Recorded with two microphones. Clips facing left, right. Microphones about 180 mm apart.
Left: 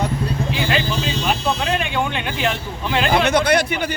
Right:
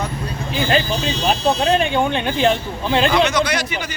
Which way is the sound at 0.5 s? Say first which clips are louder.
Right 6 dB; 35° right (ahead or behind).